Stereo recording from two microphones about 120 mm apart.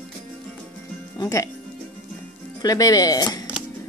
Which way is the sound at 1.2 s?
25° left (ahead or behind).